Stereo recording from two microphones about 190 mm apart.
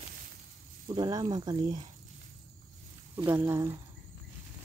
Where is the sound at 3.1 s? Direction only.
15° right (ahead or behind).